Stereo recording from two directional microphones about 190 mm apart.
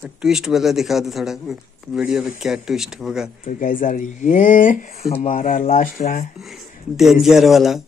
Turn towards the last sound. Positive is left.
turn(degrees=0)  # may be behind; listen again after turning